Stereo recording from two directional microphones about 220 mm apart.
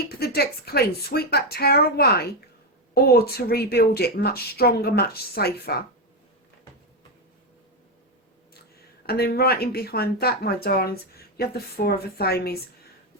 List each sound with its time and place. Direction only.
0.0 s speech: 45° left (ahead or behind)
9.0 s speech: 45° left (ahead or behind)